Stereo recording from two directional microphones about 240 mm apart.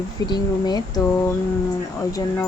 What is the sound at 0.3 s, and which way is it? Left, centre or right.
Speech, centre.